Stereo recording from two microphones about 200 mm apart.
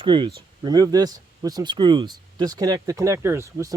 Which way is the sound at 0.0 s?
25° right (ahead or behind).